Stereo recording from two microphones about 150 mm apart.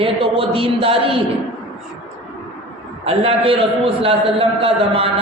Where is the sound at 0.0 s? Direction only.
40° right (ahead or behind).